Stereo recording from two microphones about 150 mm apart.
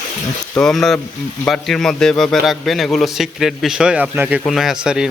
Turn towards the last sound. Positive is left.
turn(degrees=-5)  # may be behind; listen again after turning